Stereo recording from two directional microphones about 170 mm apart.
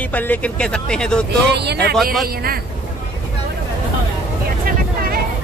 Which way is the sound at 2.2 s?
65° right (ahead or behind).